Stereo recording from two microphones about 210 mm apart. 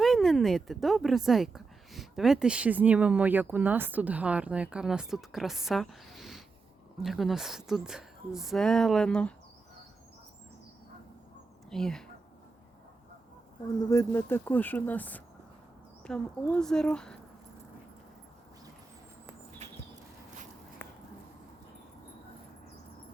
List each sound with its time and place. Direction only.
0.0 s a woman's voice: centre (ahead or behind)
11.7 s a woman's voice: centre (ahead or behind)
13.9 s a woman's voice: 15° left (ahead or behind)
20.8 s a sound: 5° left (ahead or behind)